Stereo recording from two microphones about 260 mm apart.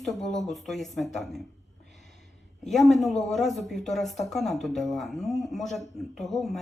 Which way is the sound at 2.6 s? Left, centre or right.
Centre.